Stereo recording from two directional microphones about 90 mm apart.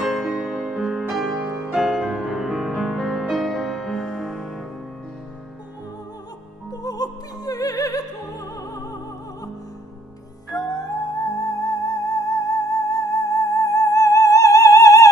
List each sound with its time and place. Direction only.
0.0 s music: 5° right (ahead or behind)
6.7 s music: 45° left (ahead or behind)
10.5 s music: 40° left (ahead or behind)